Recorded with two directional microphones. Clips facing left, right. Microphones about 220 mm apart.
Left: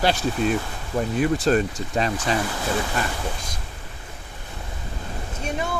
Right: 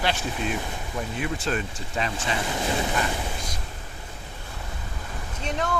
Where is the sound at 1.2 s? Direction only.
40° left (ahead or behind).